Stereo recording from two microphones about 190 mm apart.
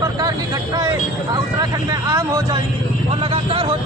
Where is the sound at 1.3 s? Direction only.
20° right (ahead or behind).